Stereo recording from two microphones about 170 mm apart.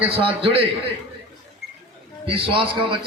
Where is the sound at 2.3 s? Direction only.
30° right (ahead or behind).